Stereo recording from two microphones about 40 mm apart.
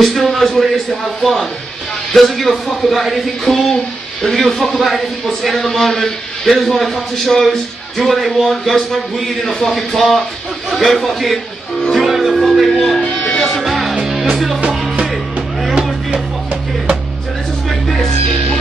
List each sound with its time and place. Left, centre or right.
0.0 s speech: centre
11.9 s music: centre
13.1 s music: left
13.4 s music: centre
13.9 s music: centre
14.6 s music: right
17.6 s music: centre